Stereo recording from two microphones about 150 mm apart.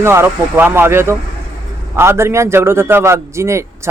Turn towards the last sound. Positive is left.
turn(degrees=-20)  # may be behind; listen again after turning